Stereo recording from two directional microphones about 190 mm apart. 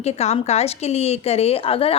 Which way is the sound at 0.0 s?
35° left (ahead or behind).